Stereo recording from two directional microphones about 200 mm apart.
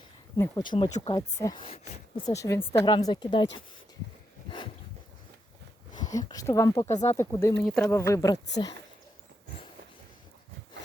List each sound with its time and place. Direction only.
0.3 s speech: 10° left (ahead or behind)
0.6 s a woman's voice: 25° left (ahead or behind)
0.9 s speech: 35° left (ahead or behind)
1.1 s a woman's voice: 20° left (ahead or behind)
2.2 s a woman's voice: 15° left (ahead or behind)
6.0 s speech: 20° left (ahead or behind)
6.9 s speech: 35° left (ahead or behind)
7.2 s speech: 15° left (ahead or behind)
7.9 s speech: 15° left (ahead or behind)